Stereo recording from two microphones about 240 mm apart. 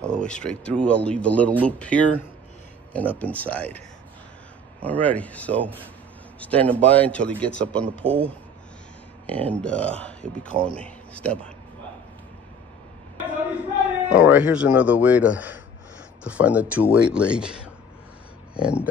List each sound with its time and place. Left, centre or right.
0.0 s speech: centre
4.8 s speech: centre
8.0 s speech: right
9.2 s speech: centre
10.5 s speech: right
10.8 s a man's voice: centre
14.0 s speech: centre